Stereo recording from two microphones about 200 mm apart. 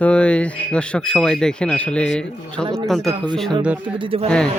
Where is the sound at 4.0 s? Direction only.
30° right (ahead or behind).